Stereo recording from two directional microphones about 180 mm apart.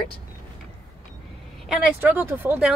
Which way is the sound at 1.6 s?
Centre (ahead or behind).